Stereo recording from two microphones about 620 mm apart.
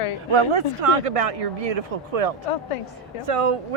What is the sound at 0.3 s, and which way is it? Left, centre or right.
Speech, right.